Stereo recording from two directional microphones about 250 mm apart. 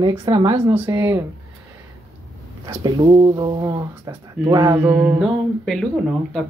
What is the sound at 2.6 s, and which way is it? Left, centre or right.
Speech, centre.